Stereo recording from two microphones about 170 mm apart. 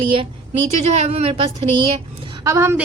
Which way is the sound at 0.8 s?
40° right (ahead or behind).